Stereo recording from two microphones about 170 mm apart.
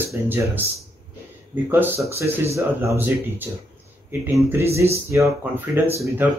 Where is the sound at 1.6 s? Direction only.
15° right (ahead or behind).